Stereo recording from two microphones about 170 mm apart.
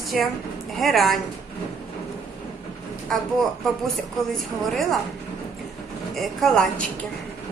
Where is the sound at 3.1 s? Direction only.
5° left (ahead or behind).